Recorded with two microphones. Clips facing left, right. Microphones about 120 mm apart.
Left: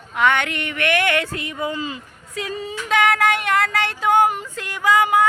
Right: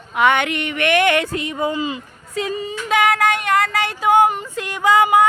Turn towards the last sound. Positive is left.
turn(degrees=-25)  # may be behind; listen again after turning